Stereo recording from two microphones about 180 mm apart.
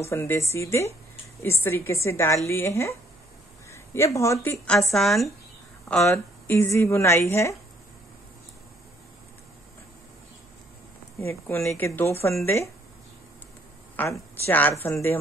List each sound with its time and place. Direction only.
0.0 s a woman's voice: 15° left (ahead or behind)
4.9 s speech: centre (ahead or behind)
5.9 s a woman's voice: 10° left (ahead or behind)
11.1 s a woman's voice: 10° left (ahead or behind)
13.9 s a woman's voice: 15° left (ahead or behind)